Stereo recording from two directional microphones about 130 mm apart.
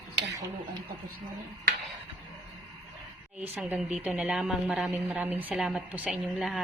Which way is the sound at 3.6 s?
10° right (ahead or behind).